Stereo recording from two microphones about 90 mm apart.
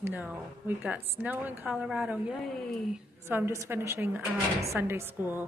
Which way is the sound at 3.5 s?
30° right (ahead or behind).